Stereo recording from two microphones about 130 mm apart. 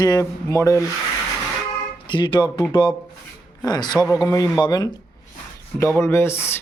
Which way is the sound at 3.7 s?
35° left (ahead or behind).